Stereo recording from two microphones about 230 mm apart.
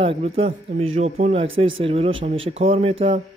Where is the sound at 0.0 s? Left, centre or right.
Right.